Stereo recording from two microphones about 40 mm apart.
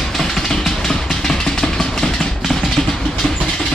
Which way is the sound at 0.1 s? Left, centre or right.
Centre.